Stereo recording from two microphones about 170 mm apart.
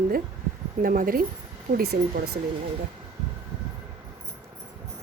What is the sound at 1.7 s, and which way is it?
Speech, 65° right (ahead or behind).